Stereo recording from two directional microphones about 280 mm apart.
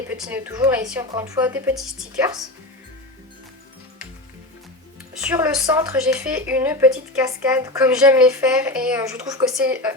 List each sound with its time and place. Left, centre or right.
0.1 s a woman's voice: centre
5.1 s a woman's voice: centre